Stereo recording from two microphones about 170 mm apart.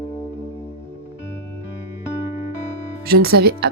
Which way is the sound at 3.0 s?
65° right (ahead or behind).